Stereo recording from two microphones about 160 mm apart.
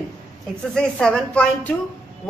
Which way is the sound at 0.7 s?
5° left (ahead or behind).